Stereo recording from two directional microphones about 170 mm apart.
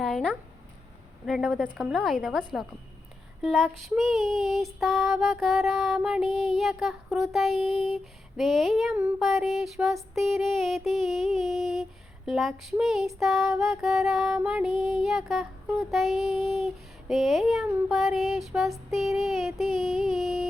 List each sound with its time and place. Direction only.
0.0 s a sound: 5° left (ahead or behind)
1.2 s child singing: centre (ahead or behind)
3.4 s child singing: centre (ahead or behind)